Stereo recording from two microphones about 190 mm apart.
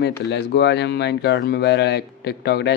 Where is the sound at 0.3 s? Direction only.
65° left (ahead or behind).